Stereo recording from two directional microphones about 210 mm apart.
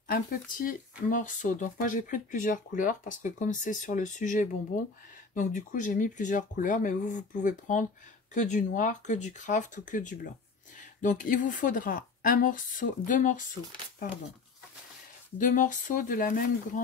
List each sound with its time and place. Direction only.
0.1 s speech: 45° left (ahead or behind)
15.3 s speech: 35° left (ahead or behind)